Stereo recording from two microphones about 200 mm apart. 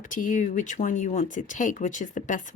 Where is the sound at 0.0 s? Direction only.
40° left (ahead or behind).